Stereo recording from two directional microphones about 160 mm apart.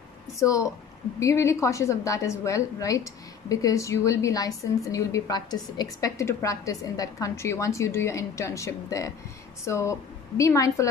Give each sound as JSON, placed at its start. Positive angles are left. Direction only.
{"t": 0.4, "sound": "a woman's voice", "side_deg": 20}